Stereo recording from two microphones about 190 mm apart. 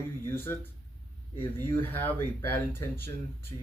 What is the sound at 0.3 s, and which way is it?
Speech, 10° left (ahead or behind).